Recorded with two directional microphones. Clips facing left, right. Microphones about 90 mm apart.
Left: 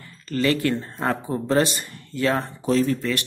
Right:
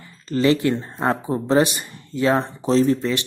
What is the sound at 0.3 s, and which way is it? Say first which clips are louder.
Speech: right 3 dB; 20° right (ahead or behind).